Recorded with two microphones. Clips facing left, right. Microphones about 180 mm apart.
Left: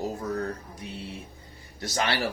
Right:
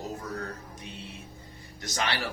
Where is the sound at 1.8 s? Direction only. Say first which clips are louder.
Left 3 dB; 35° left (ahead or behind).